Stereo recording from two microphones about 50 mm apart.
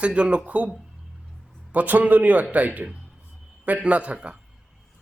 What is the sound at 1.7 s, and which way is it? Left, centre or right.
A man's voice, right.